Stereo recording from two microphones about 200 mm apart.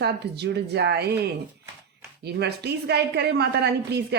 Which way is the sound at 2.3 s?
55° right (ahead or behind).